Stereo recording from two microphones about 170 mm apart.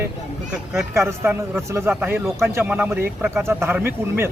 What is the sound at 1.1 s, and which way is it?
Speech, 15° right (ahead or behind).